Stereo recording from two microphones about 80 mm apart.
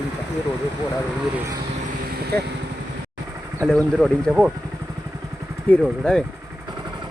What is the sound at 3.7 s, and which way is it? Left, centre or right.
Speech, centre.